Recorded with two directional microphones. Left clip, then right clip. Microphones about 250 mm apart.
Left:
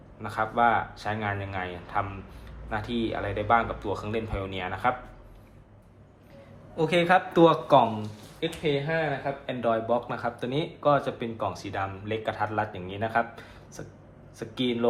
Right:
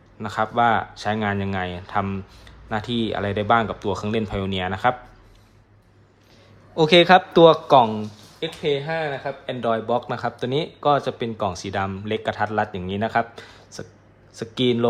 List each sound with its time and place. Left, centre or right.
0.2 s speech: right
6.7 s speech: right